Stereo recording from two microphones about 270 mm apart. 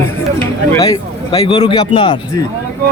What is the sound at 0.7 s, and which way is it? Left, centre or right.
A man's voice, centre.